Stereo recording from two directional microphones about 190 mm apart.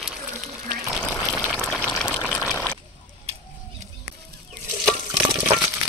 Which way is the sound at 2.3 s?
5° left (ahead or behind).